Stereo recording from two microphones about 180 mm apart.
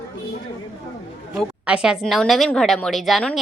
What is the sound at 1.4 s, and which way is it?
A woman's voice, 5° right (ahead or behind).